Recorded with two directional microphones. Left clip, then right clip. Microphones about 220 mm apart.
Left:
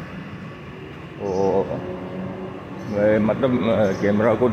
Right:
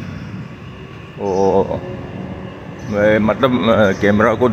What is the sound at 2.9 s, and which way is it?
Speech, 10° right (ahead or behind).